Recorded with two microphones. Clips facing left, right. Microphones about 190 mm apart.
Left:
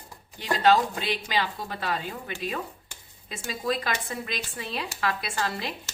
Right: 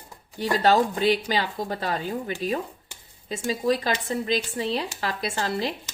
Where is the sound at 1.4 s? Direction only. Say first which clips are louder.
Right 2 dB; 40° right (ahead or behind).